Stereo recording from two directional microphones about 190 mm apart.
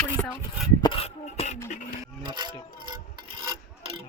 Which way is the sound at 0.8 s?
30° left (ahead or behind).